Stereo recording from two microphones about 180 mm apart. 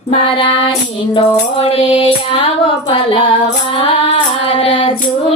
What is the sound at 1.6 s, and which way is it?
Female singing, 30° left (ahead or behind).